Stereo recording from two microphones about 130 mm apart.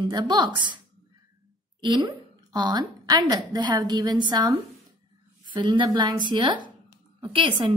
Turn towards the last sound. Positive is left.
turn(degrees=-40)  # may be behind; listen again after turning